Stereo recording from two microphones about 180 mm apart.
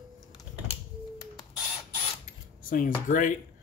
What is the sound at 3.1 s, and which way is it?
Speech, 45° left (ahead or behind).